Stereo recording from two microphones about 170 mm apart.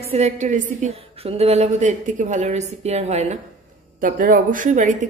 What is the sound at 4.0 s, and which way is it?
Speech, 55° right (ahead or behind).